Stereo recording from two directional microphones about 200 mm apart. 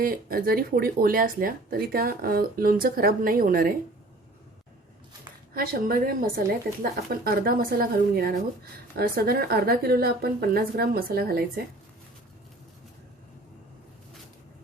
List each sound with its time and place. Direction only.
0.0 s speech: 45° right (ahead or behind)
5.5 s speech: 45° right (ahead or behind)